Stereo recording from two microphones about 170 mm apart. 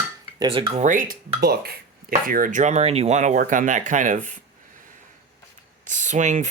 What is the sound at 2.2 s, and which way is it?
Speech, 55° right (ahead or behind).